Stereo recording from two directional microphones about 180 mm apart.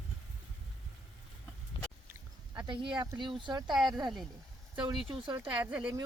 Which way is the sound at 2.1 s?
20° right (ahead or behind).